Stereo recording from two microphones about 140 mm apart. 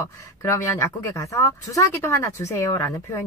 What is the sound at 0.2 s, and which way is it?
Speech, 20° left (ahead or behind).